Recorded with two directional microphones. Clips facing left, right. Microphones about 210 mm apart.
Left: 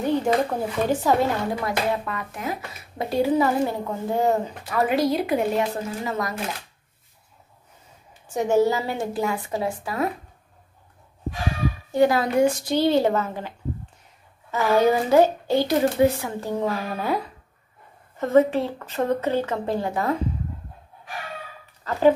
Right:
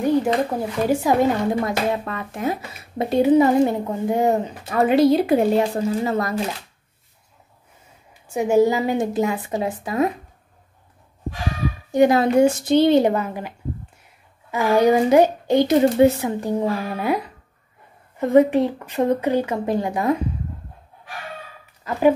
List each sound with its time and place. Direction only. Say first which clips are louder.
0.0 s a sound: right 4 dB; 10° right (ahead or behind)
0.3 s a child's voice: right 1 dB; 5° right (ahead or behind)
1.5 s speech: right 3 dB; 25° right (ahead or behind)
8.1 s speech: right 2 dB; 10° right (ahead or behind)
11.9 s speech: right 4 dB; 20° right (ahead or behind)
14.5 s a child's voice: right 3 dB; 15° right (ahead or behind)
18.2 s a child's voice: right 3 dB; 15° right (ahead or behind)